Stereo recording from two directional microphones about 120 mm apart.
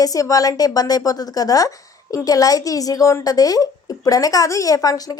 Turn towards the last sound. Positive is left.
turn(degrees=30)  # may be behind; listen again after turning